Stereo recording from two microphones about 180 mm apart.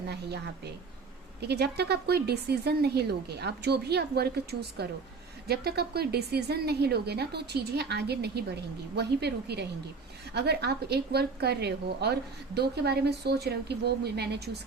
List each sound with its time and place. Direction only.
0.1 s a woman's voice: 65° right (ahead or behind)